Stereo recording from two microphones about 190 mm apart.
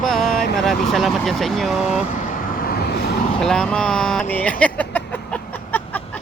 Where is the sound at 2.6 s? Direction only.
55° left (ahead or behind).